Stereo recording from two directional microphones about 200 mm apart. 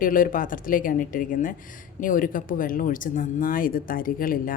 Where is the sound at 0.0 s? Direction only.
45° left (ahead or behind).